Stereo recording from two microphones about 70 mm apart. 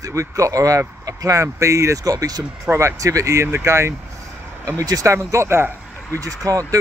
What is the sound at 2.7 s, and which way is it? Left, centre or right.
Speech, right.